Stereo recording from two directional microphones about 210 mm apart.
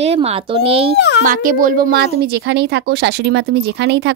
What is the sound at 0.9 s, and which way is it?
Speech, 55° left (ahead or behind).